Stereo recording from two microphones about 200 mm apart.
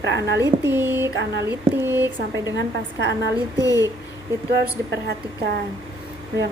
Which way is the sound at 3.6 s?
15° left (ahead or behind).